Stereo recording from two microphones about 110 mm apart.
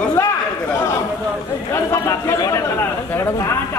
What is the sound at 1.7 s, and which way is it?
Speech, 25° left (ahead or behind).